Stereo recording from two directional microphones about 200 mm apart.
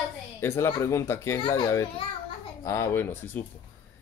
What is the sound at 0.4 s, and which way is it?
Speech, 10° left (ahead or behind).